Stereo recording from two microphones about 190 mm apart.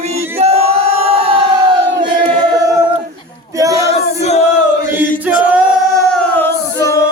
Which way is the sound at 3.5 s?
15° right (ahead or behind).